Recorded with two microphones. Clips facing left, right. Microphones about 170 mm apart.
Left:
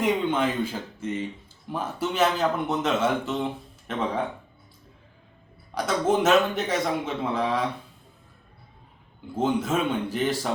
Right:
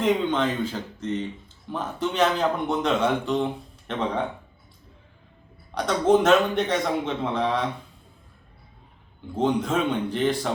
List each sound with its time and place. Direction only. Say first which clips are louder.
0.0 s a man's voice: right 1 dB; 10° left (ahead or behind)
5.7 s a man's voice: right 3 dB; 5° left (ahead or behind)
9.3 s a man's voice: right 1 dB; 5° left (ahead or behind)